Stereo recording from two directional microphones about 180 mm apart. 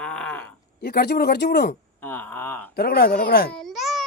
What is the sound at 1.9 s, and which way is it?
Speech, 10° left (ahead or behind).